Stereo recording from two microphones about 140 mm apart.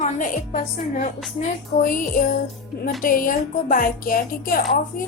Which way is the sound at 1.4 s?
80° left.